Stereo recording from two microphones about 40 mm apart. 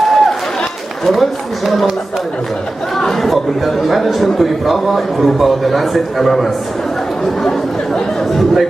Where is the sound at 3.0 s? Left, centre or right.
Centre.